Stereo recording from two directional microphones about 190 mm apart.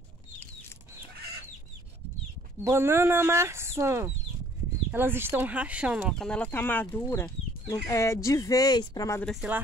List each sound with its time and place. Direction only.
2.6 s speech: 15° right (ahead or behind); by 9.2 s 20° left (ahead or behind)
9.2 s speech: centre (ahead or behind)